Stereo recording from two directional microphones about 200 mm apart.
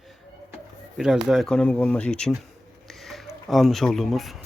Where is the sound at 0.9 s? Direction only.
Centre (ahead or behind).